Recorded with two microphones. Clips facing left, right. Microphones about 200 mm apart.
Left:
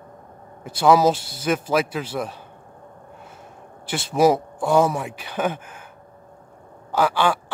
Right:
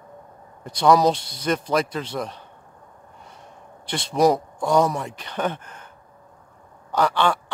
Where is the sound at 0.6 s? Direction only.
5° left (ahead or behind).